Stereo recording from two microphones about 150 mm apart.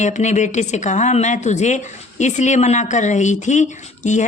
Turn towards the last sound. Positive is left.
turn(degrees=55)  # may be behind; listen again after turning